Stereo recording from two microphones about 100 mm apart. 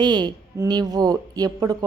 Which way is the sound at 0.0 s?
45° right (ahead or behind).